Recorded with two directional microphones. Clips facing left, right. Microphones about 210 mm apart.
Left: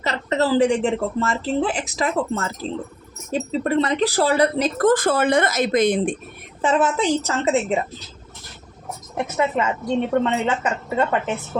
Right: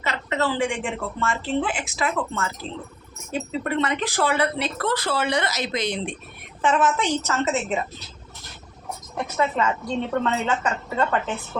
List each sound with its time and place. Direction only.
0.0 s speech: 35° left (ahead or behind)
6.6 s speech: 35° left (ahead or behind)
9.1 s a woman's voice: 20° left (ahead or behind)